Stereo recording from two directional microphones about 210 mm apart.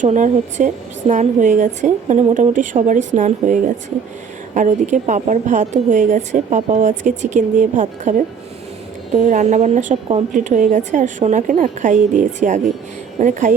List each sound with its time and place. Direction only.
0.0 s a woman's voice: 35° right (ahead or behind)
9.1 s a woman's voice: 35° right (ahead or behind)